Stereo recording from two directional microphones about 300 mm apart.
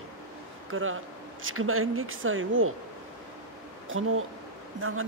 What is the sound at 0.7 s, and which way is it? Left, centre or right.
Speech, right.